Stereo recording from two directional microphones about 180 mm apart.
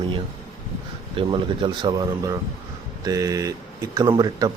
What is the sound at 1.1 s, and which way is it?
Speech, 25° right (ahead or behind).